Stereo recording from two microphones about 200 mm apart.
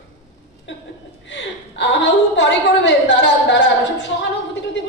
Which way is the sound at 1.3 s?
65° left (ahead or behind).